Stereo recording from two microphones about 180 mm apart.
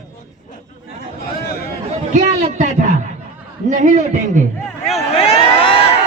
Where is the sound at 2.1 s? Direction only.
40° right (ahead or behind).